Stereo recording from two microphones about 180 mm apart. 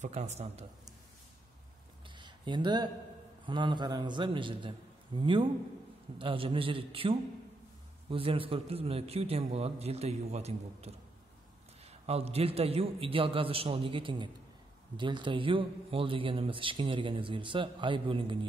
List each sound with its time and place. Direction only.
0.0 s a man's voice: 40° right (ahead or behind)
2.0 s a sound: 25° right (ahead or behind)
3.4 s a man's voice: 25° right (ahead or behind)